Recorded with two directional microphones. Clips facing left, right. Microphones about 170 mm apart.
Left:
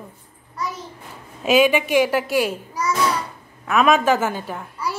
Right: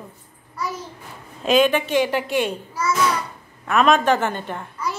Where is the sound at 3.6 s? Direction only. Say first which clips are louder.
Even; 5° left (ahead or behind).